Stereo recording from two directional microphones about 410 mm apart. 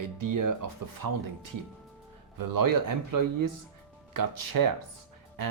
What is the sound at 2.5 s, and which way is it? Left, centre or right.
Speech, right.